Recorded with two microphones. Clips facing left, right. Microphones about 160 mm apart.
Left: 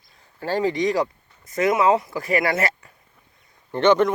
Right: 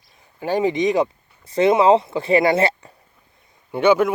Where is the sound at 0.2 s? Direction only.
15° right (ahead or behind).